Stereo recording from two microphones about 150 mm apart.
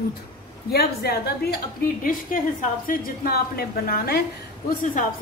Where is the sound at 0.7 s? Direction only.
90° left.